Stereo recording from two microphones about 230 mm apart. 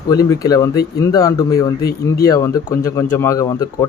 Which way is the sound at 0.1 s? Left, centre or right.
Centre.